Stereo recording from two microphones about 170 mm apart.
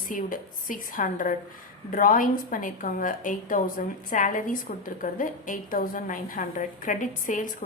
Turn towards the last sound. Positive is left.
turn(degrees=50)  # may be behind; listen again after turning